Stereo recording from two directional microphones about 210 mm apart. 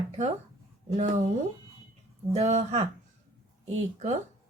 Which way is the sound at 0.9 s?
30° right (ahead or behind).